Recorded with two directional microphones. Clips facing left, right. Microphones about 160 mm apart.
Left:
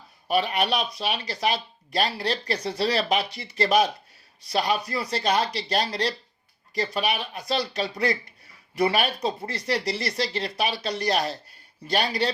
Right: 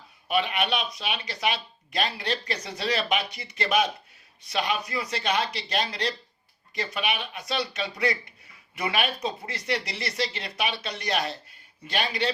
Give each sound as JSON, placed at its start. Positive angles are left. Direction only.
{"t": 0.3, "sound": "speech", "side_deg": 40}